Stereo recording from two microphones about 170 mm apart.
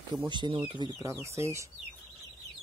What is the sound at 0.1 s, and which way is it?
Speech, 25° right (ahead or behind).